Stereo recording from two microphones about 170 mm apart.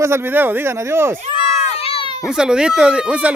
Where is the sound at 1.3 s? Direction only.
30° left (ahead or behind).